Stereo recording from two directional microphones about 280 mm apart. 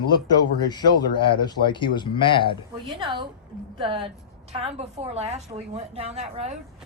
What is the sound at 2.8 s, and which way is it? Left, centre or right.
A woman's voice, centre.